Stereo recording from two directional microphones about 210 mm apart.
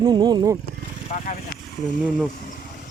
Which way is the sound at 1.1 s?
35° left (ahead or behind).